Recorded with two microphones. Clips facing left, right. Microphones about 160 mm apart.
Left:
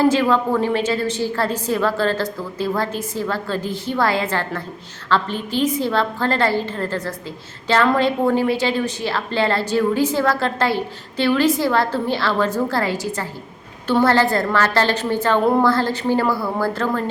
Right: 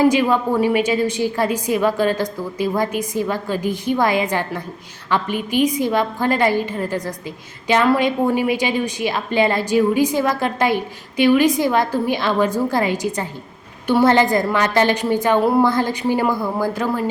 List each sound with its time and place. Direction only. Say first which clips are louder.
0.0 s a woman's voice: right 1 dB; 15° right (ahead or behind)